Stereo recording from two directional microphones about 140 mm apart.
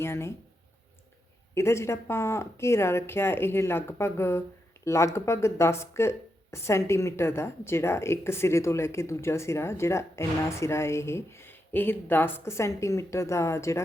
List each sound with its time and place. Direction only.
0.0 s speech: 20° left (ahead or behind)
1.5 s speech: 20° left (ahead or behind)